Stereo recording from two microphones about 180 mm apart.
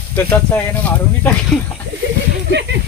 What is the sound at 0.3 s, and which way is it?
Speech, 10° left (ahead or behind).